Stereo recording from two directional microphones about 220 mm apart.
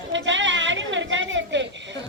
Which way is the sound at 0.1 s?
55° right (ahead or behind).